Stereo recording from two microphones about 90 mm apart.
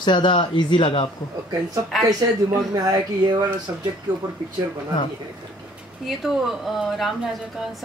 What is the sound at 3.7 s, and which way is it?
Speech, 30° right (ahead or behind).